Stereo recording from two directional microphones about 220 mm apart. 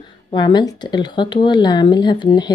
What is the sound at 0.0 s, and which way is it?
Speech, 20° left (ahead or behind).